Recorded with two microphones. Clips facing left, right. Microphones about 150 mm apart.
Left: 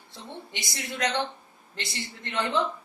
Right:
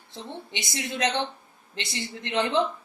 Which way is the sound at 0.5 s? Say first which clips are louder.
Right 5 dB; 20° right (ahead or behind).